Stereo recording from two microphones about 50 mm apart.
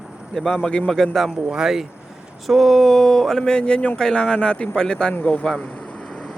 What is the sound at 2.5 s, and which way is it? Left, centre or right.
Speech, centre.